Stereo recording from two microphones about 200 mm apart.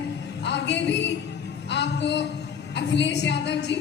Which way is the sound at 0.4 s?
60° left (ahead or behind).